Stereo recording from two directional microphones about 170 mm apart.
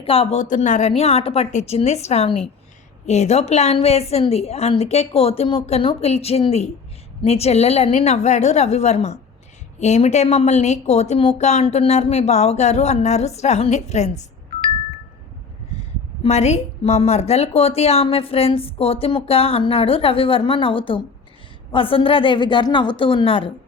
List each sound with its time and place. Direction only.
0.0 s a woman's voice: 35° left (ahead or behind)
16.2 s a woman's voice: 40° left (ahead or behind)